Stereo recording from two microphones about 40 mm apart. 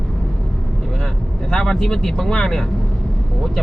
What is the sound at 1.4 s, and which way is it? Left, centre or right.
Speech, centre.